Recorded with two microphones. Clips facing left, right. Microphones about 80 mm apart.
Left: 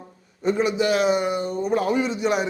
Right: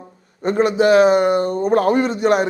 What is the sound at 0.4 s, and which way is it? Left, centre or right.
A man's voice, right.